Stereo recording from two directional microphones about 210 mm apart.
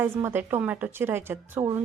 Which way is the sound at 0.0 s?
10° right (ahead or behind).